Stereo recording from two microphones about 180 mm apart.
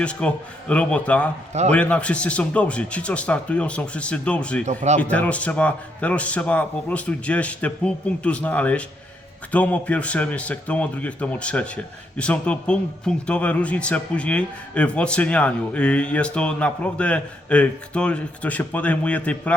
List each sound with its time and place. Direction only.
0.0 s speech: 5° left (ahead or behind)
4.6 s speech: 40° right (ahead or behind)
4.9 s speech: 10° left (ahead or behind)